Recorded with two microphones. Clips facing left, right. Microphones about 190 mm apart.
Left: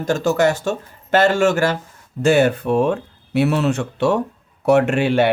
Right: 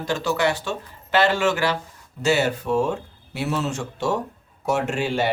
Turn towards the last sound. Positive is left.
turn(degrees=65)  # may be behind; listen again after turning